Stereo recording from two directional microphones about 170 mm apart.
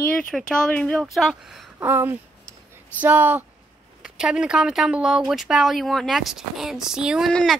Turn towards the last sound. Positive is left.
turn(degrees=0)  # may be behind; listen again after turning